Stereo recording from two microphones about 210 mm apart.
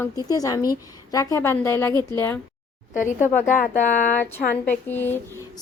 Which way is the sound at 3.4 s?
40° left (ahead or behind).